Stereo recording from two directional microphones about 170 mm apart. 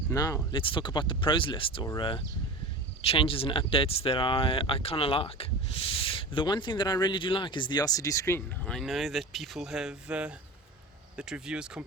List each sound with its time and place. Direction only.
0.1 s speech: 20° left (ahead or behind); by 11.9 s 5° right (ahead or behind)